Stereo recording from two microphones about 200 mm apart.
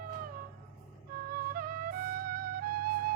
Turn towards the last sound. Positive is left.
turn(degrees=-45)  # may be behind; listen again after turning